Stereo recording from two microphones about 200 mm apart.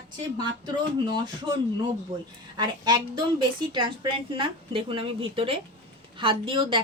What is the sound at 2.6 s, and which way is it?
Speech, 20° right (ahead or behind).